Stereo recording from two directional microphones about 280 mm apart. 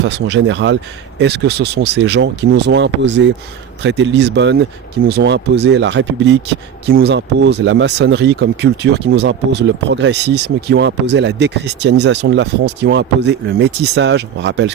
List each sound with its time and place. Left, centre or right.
0.0 s speech: right